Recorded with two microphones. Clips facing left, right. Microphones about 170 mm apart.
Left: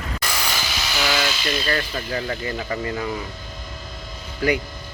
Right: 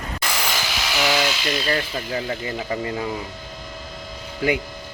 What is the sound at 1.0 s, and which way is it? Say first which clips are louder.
Speech: right 2 dB; 15° right (ahead or behind).